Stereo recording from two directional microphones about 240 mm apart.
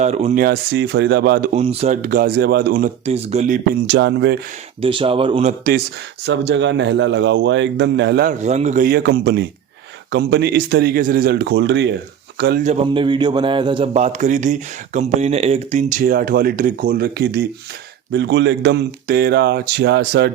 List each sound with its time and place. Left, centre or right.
0.0 s a man's voice: right
0.4 s a man's voice: right
1.5 s speech: right
3.8 s a man's voice: right
4.8 s a man's voice: right
6.2 s a man's voice: right
12.6 s a man's voice: right